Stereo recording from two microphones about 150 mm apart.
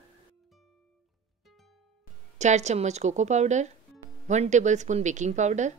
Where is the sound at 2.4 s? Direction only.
50° right (ahead or behind).